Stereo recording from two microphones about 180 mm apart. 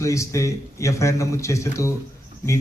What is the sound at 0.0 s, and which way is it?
A man's voice, 15° left (ahead or behind).